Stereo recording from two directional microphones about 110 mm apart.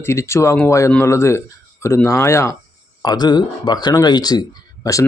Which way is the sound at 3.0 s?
40° left (ahead or behind).